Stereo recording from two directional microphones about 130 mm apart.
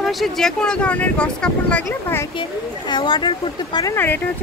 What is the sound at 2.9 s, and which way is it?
Speech, 35° left (ahead or behind).